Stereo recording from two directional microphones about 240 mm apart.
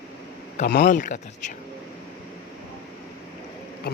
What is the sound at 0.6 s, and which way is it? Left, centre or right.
Speech, left.